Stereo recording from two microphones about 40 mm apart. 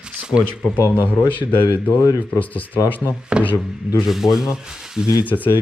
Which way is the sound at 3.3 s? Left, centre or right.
Right.